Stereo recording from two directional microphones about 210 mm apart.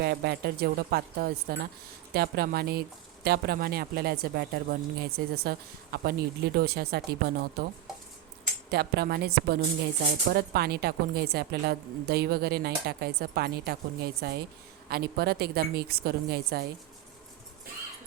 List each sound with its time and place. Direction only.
0.0 s a woman's voice: 50° right (ahead or behind)
8.7 s a woman's voice: 50° right (ahead or behind)